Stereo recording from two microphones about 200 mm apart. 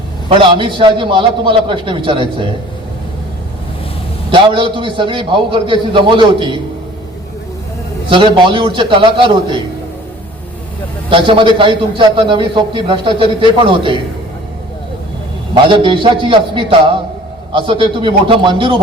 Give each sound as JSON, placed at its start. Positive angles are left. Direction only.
{"t": 0.3, "sound": "a man's voice", "side_deg": -25}
{"t": 4.3, "sound": "a man's voice", "side_deg": -25}
{"t": 8.1, "sound": "a man's voice", "side_deg": -25}
{"t": 11.1, "sound": "a man's voice", "side_deg": -25}
{"t": 15.7, "sound": "a man's voice", "side_deg": -25}